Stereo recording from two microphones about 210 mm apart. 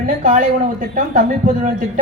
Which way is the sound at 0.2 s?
40° right (ahead or behind).